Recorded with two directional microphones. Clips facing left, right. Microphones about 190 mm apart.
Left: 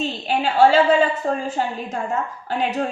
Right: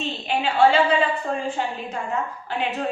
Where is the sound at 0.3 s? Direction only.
40° left (ahead or behind).